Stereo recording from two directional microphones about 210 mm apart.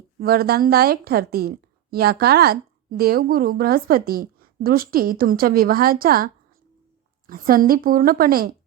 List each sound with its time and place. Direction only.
0.2 s a woman's voice: 45° right (ahead or behind)